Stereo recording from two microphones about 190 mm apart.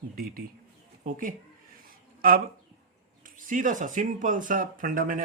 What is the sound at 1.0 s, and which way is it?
Speech, 45° right (ahead or behind).